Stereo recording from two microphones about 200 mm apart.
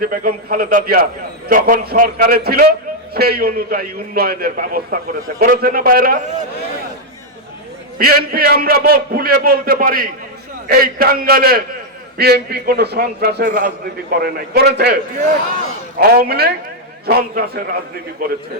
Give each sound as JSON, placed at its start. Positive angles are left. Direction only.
{"t": 0.0, "sound": "a man's voice", "side_deg": -45}
{"t": 7.9, "sound": "a man's voice", "side_deg": -50}
{"t": 16.0, "sound": "a man's voice", "side_deg": -50}